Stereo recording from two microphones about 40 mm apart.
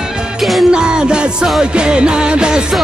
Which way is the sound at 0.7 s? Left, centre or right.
Right.